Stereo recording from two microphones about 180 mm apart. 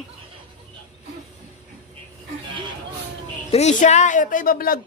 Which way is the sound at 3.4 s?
40° left (ahead or behind).